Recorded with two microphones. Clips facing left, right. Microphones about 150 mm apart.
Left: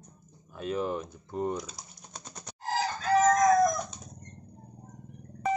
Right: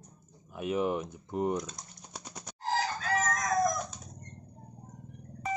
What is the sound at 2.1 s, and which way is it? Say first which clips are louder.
Frog: right 1 dB; 10° right (ahead or behind).